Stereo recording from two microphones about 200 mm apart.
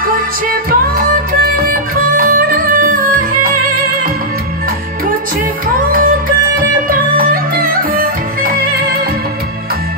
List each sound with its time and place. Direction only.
0.5 s music: 45° right (ahead or behind)
5.9 s music: 45° right (ahead or behind)